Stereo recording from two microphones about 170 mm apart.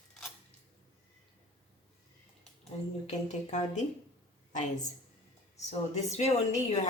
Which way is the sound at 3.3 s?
45° left (ahead or behind).